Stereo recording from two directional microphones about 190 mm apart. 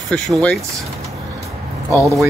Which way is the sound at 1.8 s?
15° right (ahead or behind).